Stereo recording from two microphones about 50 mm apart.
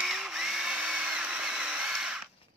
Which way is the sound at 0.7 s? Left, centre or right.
Centre.